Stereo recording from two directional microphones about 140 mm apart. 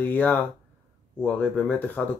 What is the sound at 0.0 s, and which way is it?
Speech, 10° left (ahead or behind).